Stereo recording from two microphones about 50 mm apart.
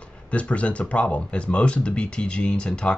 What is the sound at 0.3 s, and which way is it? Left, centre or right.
Speech, left.